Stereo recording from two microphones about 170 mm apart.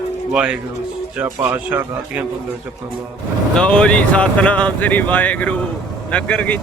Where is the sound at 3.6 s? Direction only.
5° left (ahead or behind).